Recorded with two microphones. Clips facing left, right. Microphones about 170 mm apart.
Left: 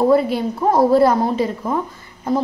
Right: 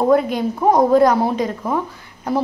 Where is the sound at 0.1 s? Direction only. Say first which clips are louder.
Even; 5° left (ahead or behind).